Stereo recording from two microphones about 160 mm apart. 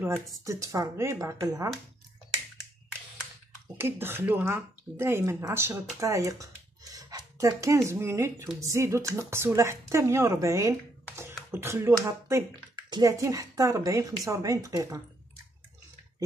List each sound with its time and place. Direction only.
0.0 s speech: 10° right (ahead or behind)
0.5 s speech: 20° right (ahead or behind)
3.7 s speech: 15° right (ahead or behind)